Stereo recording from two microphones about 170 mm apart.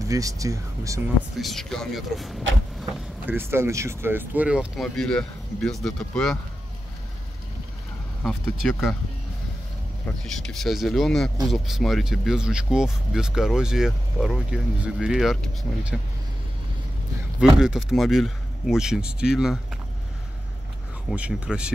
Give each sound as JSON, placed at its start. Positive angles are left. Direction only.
{"t": 0.1, "sound": "speech", "side_deg": -20}
{"t": 1.4, "sound": "speech", "side_deg": 0}
{"t": 2.9, "sound": "speech", "side_deg": -10}
{"t": 8.3, "sound": "speech", "side_deg": 0}
{"t": 10.2, "sound": "speech", "side_deg": 0}
{"t": 17.6, "sound": "speech", "side_deg": -5}
{"t": 21.1, "sound": "speech", "side_deg": -5}